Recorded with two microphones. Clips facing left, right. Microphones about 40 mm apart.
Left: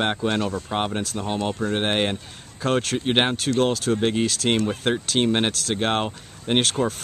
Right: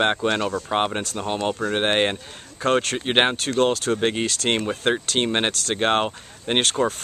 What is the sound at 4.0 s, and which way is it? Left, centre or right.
Speech, centre.